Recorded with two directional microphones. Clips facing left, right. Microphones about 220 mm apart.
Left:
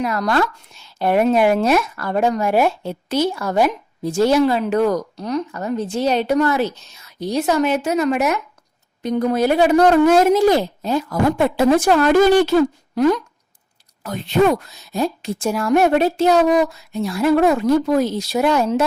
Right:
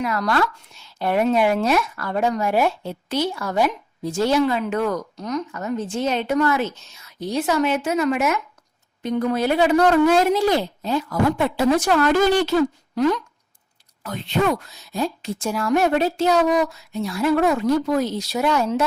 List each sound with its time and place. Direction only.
0.0 s speech: 40° left (ahead or behind)